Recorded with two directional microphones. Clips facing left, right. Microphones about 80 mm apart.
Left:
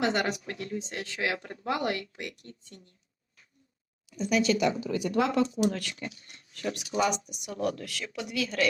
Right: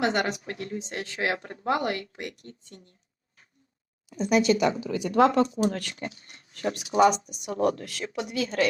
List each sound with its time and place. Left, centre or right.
0.0 s a woman's voice: right
0.4 s a woman's voice: right
4.3 s speech: right
5.1 s a woman's voice: right
5.5 s a woman's voice: right